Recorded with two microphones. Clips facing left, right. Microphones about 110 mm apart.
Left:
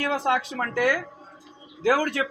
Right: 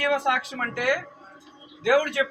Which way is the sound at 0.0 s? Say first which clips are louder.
Even; 30° left (ahead or behind).